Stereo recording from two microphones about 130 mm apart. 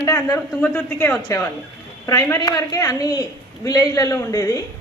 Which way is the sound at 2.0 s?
25° left (ahead or behind).